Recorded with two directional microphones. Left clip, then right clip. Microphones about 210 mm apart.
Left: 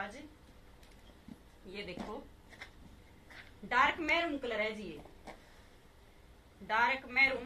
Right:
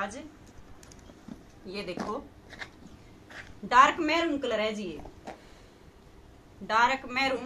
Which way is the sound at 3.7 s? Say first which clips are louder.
Right 8 dB; 5° right (ahead or behind).